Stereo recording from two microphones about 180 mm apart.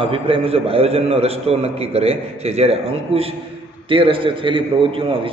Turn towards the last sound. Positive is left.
turn(degrees=-30)  # may be behind; listen again after turning